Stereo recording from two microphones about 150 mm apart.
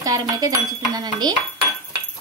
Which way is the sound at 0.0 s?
25° right (ahead or behind).